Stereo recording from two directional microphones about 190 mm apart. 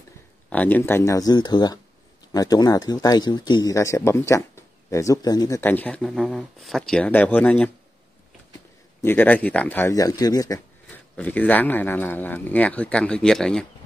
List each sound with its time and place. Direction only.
0.5 s speech: 10° left (ahead or behind)
9.0 s speech: 10° left (ahead or behind)
11.1 s speech: 10° left (ahead or behind)